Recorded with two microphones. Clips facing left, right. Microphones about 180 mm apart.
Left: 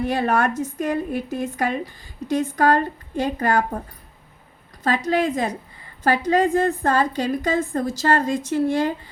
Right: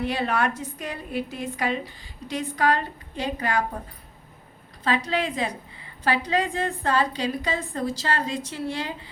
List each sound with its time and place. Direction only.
0.0 s a woman's voice: 45° left (ahead or behind)
4.8 s a woman's voice: 45° left (ahead or behind)